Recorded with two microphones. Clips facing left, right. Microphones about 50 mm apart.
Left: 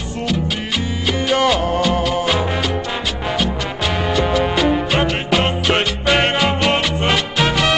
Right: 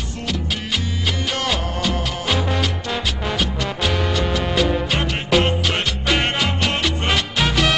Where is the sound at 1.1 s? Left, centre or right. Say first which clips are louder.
Left 7 dB; centre.